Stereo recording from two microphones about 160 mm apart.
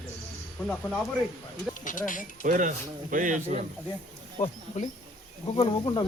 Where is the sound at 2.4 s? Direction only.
55° right (ahead or behind).